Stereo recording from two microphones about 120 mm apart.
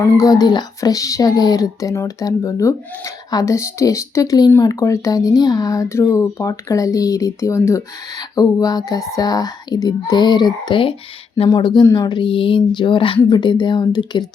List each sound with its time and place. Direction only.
0.0 s speech: 30° left (ahead or behind)